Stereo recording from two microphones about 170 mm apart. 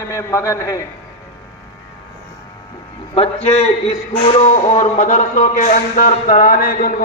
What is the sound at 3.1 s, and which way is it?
A man's voice, 35° left (ahead or behind).